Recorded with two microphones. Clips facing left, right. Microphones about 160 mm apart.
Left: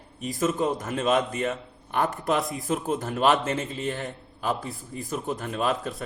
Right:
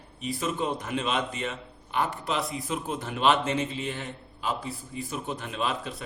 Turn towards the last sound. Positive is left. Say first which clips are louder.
# left 4 dB
turn(degrees=45)  # may be behind; listen again after turning